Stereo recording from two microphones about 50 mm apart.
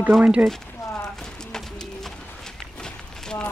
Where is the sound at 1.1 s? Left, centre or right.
Centre.